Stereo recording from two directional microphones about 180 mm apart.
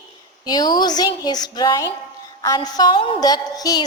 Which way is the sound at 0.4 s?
20° left (ahead or behind).